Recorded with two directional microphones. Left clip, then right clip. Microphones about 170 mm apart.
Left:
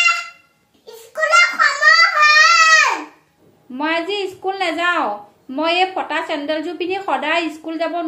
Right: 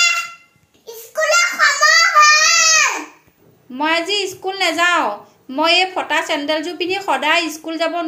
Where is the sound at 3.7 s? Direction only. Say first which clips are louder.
Right 3 dB; centre (ahead or behind).